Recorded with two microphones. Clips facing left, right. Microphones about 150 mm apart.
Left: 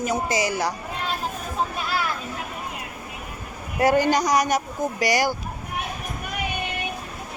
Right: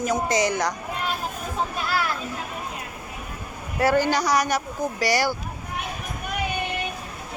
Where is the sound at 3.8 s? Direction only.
15° left (ahead or behind).